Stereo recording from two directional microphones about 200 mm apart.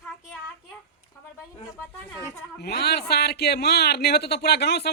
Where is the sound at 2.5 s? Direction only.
55° left (ahead or behind).